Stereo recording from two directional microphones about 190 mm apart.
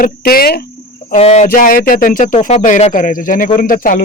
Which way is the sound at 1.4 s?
50° left (ahead or behind).